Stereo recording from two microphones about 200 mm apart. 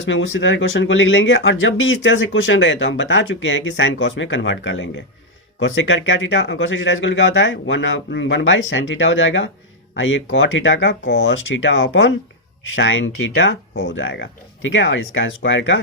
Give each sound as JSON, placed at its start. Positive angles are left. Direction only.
{"t": 0.0, "sound": "speech", "side_deg": 65}